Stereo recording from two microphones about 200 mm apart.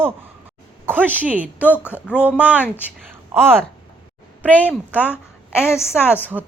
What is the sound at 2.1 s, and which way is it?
Speech, 5° right (ahead or behind).